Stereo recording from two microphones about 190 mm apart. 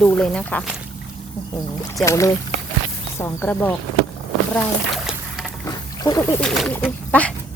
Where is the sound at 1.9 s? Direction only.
15° left (ahead or behind).